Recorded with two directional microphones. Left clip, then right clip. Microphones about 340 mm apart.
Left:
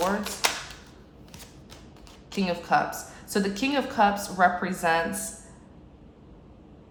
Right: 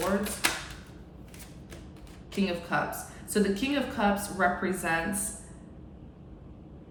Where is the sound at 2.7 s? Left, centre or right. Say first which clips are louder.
Left 6 dB; centre.